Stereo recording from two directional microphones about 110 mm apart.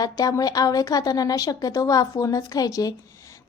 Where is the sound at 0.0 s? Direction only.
35° left (ahead or behind).